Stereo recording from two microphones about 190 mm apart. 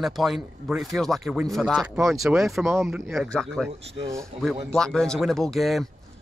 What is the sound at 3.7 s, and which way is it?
Speech, 35° right (ahead or behind).